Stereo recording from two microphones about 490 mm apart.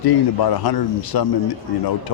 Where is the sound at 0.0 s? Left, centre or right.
Left.